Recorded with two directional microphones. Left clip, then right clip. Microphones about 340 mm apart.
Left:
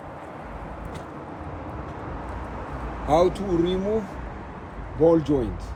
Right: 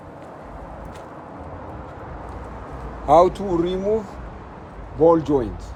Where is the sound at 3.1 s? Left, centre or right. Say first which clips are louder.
Right 6 dB; right.